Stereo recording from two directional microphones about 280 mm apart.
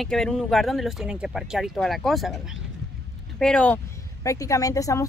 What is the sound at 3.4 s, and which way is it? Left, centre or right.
Speech, centre.